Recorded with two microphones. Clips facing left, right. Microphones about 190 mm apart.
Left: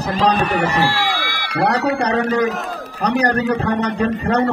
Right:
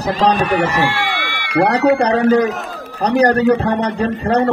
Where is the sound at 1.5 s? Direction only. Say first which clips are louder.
Right 5 dB; 35° right (ahead or behind).